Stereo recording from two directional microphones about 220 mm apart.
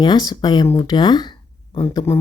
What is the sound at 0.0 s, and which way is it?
Speech, 20° left (ahead or behind).